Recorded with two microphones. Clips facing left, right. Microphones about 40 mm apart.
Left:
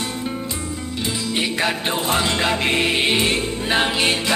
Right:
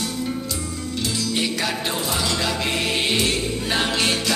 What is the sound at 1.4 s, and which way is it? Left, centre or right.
Music, left.